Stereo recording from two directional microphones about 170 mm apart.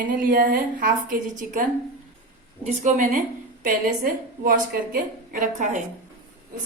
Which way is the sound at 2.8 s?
55° right (ahead or behind).